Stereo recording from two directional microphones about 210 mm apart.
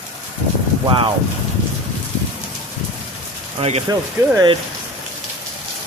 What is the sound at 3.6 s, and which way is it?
Speech, 30° right (ahead or behind).